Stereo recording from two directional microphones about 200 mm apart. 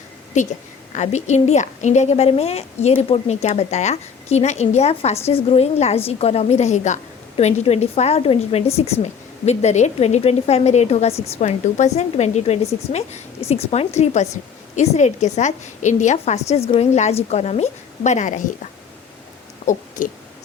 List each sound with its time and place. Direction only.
0.4 s a woman's voice: 35° left (ahead or behind)
19.7 s a woman's voice: 40° left (ahead or behind)